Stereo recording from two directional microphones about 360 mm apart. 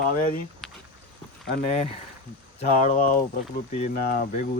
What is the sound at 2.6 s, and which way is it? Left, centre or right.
Speech, centre.